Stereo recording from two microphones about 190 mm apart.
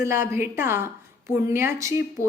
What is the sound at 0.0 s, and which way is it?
Speech, 15° right (ahead or behind).